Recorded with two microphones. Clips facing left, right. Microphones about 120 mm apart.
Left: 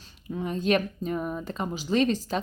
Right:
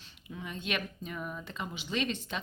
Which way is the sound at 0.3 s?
40° left (ahead or behind).